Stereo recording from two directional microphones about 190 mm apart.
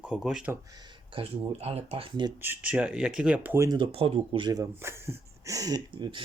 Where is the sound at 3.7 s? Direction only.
30° right (ahead or behind).